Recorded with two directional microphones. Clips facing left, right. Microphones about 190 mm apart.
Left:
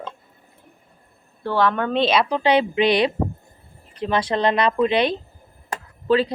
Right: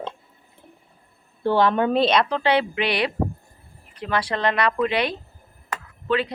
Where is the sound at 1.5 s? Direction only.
20° right (ahead or behind).